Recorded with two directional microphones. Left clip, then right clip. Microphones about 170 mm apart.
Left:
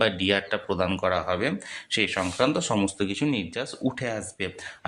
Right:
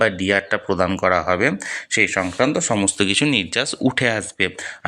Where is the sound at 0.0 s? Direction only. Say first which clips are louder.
Right 5 dB; 20° right (ahead or behind).